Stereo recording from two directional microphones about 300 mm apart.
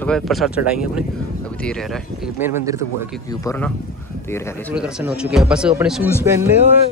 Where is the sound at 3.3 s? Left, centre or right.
Centre.